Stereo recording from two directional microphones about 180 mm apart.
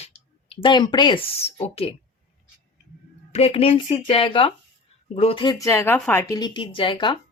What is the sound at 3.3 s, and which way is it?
A woman's voice, 35° left (ahead or behind).